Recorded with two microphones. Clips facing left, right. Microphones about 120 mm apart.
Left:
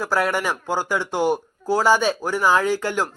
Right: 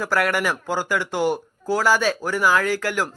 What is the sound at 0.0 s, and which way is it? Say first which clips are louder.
A man's voice: even; 15° left (ahead or behind).